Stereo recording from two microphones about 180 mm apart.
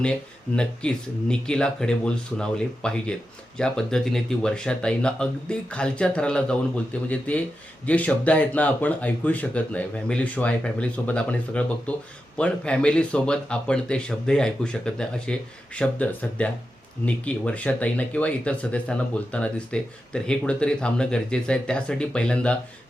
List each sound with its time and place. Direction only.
0.0 s speech: 5° left (ahead or behind)